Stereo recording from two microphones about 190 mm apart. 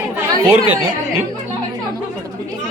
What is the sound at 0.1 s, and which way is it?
Chatter, 15° right (ahead or behind).